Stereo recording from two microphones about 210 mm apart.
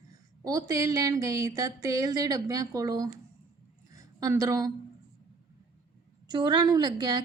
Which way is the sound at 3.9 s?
15° right (ahead or behind).